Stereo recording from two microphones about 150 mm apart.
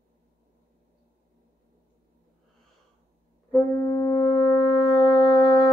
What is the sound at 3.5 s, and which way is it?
Wind instrument, 20° left (ahead or behind).